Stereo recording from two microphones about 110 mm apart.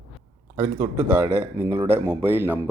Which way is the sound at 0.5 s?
45° right (ahead or behind).